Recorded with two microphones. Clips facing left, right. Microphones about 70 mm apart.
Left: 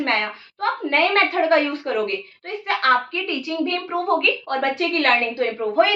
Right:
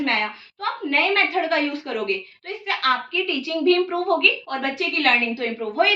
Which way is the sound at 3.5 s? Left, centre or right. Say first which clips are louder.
Right 8 dB; centre.